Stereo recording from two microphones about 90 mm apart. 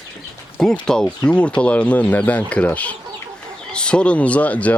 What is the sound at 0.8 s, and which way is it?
Speech, 10° left (ahead or behind).